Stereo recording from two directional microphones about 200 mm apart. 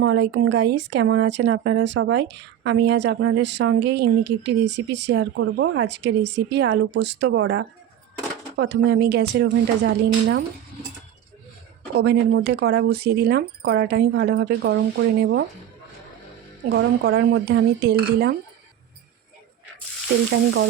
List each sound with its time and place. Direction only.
0.0 s speech: 60° right (ahead or behind)
8.5 s speech: 50° right (ahead or behind)
11.9 s speech: 55° right (ahead or behind)
16.7 s speech: 65° right (ahead or behind)